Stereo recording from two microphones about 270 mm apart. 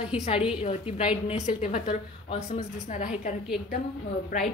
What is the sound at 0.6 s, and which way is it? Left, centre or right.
A woman's voice, left.